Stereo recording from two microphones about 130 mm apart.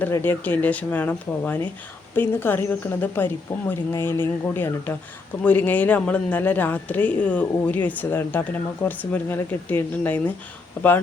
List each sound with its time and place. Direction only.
0.1 s speech: 15° left (ahead or behind)